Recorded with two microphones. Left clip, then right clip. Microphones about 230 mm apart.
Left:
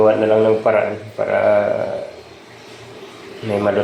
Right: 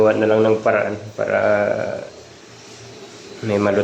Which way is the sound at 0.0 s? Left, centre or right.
Centre.